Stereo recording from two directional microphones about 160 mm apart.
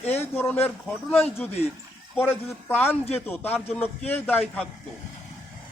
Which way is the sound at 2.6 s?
15° left (ahead or behind).